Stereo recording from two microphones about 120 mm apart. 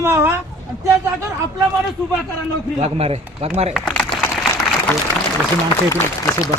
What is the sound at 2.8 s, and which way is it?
Speech, 60° right (ahead or behind).